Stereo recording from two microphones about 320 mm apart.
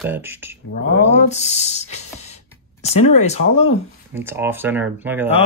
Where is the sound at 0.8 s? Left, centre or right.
Left.